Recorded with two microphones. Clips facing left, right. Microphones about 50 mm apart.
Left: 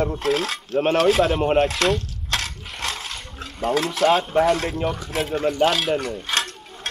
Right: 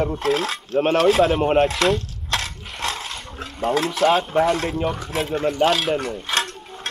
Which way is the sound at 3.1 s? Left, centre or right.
Centre.